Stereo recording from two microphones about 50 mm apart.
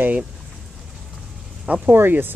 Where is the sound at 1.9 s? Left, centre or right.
Right.